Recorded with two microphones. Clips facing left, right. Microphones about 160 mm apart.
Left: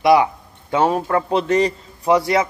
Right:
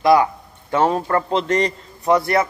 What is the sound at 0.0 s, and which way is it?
A man's voice, 15° left (ahead or behind).